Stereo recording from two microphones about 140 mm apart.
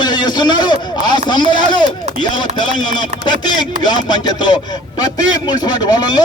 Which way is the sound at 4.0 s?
30° left (ahead or behind).